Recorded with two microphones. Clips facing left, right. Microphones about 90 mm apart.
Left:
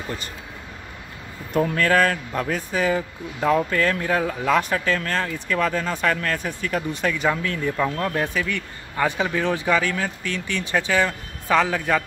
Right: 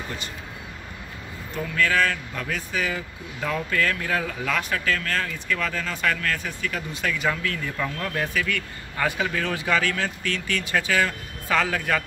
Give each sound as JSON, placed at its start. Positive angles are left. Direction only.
{"t": 1.5, "sound": "a man's voice", "side_deg": 45}
{"t": 7.2, "sound": "speech", "side_deg": 20}